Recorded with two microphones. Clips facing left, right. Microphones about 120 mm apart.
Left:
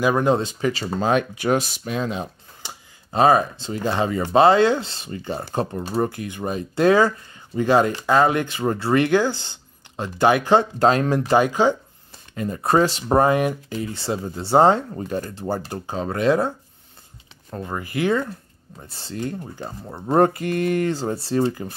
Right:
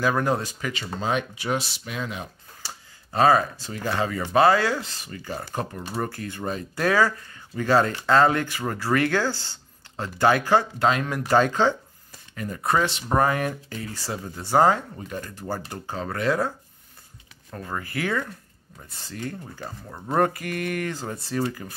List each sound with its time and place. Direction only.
0.0 s speech: 20° left (ahead or behind)
0.9 s speech: 50° left (ahead or behind)
2.0 s speech: 30° left (ahead or behind)
10.8 s speech: 35° left (ahead or behind)
11.3 s speech: 10° left (ahead or behind)
12.4 s speech: 30° left (ahead or behind)
13.2 s speech: 20° left (ahead or behind)